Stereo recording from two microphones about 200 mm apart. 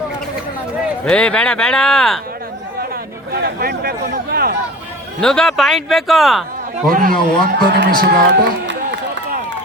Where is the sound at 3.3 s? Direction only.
50° right (ahead or behind).